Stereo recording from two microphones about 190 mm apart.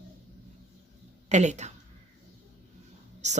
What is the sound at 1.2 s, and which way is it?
Speech, 40° right (ahead or behind).